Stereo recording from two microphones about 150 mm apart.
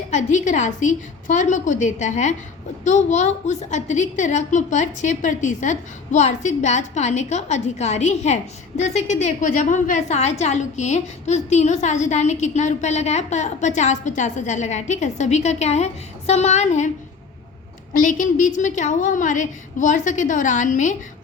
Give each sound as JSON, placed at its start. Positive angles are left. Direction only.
{"t": 0.1, "sound": "a woman's voice", "side_deg": 50}
{"t": 18.0, "sound": "a woman's voice", "side_deg": 60}